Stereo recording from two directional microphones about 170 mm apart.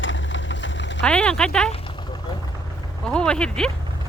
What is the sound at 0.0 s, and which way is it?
Vehicle, 90° left.